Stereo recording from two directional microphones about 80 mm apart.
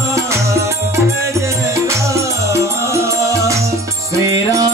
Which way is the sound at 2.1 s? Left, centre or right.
Right.